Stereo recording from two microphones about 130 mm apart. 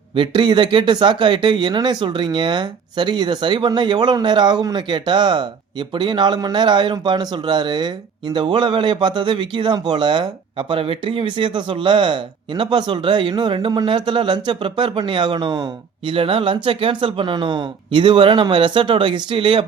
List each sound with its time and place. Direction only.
0.1 s speech: 40° right (ahead or behind)